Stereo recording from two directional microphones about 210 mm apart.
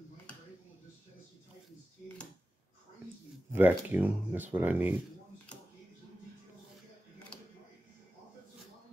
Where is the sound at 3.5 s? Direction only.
10° right (ahead or behind).